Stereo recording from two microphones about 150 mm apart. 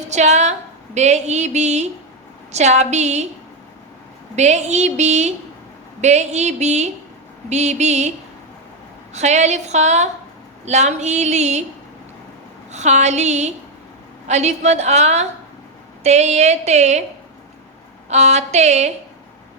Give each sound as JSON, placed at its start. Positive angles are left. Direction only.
{"t": 0.1, "sound": "a woman's voice", "side_deg": -50}
{"t": 4.4, "sound": "a woman's voice", "side_deg": -50}
{"t": 9.1, "sound": "a woman's voice", "side_deg": -50}
{"t": 12.7, "sound": "a woman's voice", "side_deg": -50}
{"t": 18.1, "sound": "a woman's voice", "side_deg": -50}